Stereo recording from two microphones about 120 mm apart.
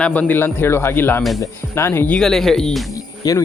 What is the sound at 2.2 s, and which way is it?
Speech, 5° left (ahead or behind).